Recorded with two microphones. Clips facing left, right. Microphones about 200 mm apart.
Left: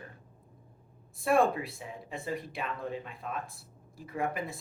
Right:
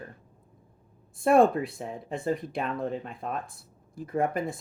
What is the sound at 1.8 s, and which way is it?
Speech, 45° right (ahead or behind).